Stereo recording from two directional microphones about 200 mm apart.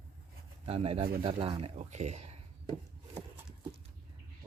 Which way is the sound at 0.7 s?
30° right (ahead or behind).